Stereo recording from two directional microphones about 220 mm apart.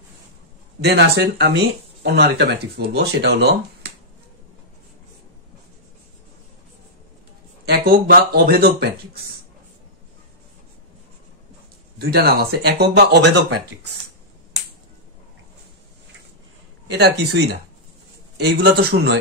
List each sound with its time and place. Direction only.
0.8 s speech: 50° right (ahead or behind)
7.6 s speech: 45° right (ahead or behind)
12.0 s speech: 45° right (ahead or behind)
16.9 s speech: 50° right (ahead or behind)